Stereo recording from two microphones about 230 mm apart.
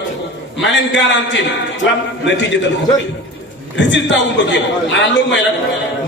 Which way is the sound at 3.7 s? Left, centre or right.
Left.